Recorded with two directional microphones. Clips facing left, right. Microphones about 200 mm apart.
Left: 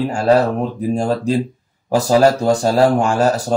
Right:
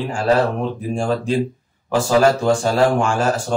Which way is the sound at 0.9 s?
40° left (ahead or behind).